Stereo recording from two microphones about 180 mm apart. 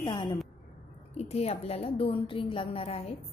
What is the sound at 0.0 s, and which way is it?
A woman's voice, 25° left (ahead or behind).